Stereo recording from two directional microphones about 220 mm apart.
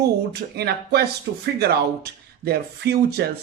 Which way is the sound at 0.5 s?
45° right (ahead or behind).